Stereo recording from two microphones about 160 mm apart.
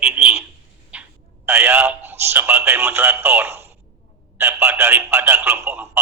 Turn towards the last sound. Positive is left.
turn(degrees=-10)  # may be behind; listen again after turning